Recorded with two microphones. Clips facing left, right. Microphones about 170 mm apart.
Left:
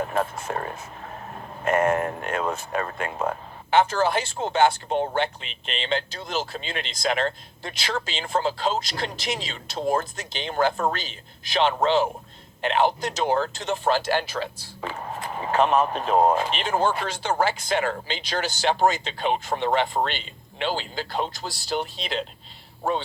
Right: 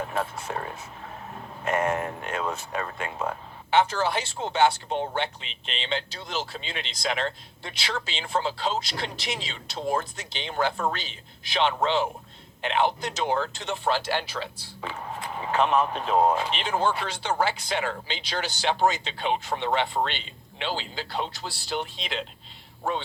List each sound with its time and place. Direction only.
0.0 s a man's voice: 50° left (ahead or behind)